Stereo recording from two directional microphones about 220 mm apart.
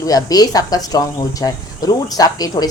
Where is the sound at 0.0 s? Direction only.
15° left (ahead or behind).